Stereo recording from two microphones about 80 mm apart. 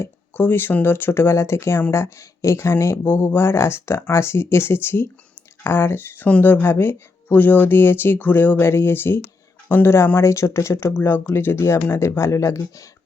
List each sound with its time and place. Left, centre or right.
0.0 s speech: left